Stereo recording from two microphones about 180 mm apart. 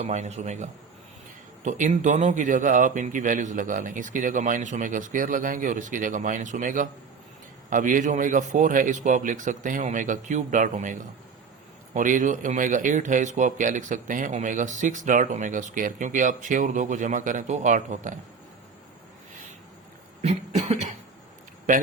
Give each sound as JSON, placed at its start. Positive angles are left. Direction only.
{"t": 0.0, "sound": "a man's voice", "side_deg": -40}
{"t": 11.9, "sound": "speech", "side_deg": -45}
{"t": 20.2, "sound": "a man's voice", "side_deg": -40}